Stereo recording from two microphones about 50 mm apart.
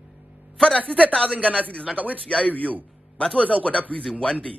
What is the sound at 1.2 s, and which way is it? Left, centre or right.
Speech, right.